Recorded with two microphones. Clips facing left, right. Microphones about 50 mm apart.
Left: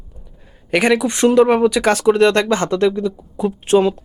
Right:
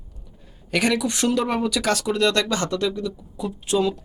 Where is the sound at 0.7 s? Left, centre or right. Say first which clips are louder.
Left 6 dB; left.